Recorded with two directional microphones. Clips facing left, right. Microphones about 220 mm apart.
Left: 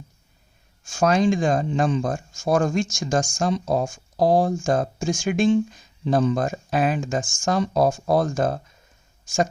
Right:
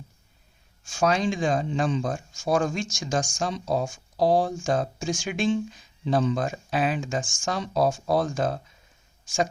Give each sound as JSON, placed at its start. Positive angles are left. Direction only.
{"t": 0.9, "sound": "speech", "side_deg": 50}